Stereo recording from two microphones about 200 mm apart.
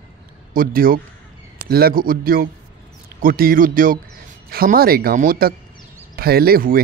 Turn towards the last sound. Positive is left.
turn(degrees=-45)  # may be behind; listen again after turning